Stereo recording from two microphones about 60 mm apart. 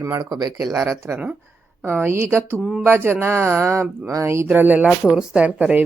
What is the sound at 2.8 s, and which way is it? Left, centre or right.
Speech, right.